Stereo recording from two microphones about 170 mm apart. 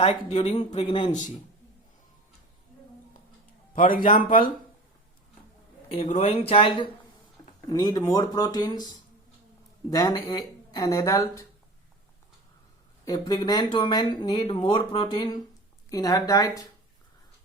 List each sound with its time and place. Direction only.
0.0 s speech: 40° left (ahead or behind)
0.9 s speech: 30° left (ahead or behind)
3.8 s a man's voice: 55° left (ahead or behind)
5.9 s speech: 40° left (ahead or behind)
7.7 s speech: 20° left (ahead or behind)
13.1 s speech: 25° left (ahead or behind)